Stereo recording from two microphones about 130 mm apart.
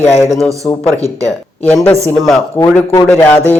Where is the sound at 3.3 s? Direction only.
15° left (ahead or behind).